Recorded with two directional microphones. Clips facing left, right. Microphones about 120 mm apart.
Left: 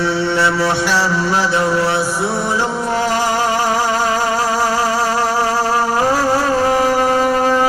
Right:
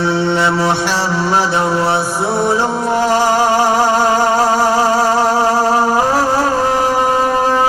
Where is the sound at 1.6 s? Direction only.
20° right (ahead or behind).